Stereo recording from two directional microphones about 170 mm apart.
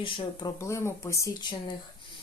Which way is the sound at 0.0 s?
25° left (ahead or behind).